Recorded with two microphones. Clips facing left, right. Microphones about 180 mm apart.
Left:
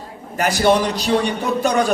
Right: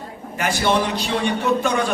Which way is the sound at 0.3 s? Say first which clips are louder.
Left 4 dB; 40° left (ahead or behind).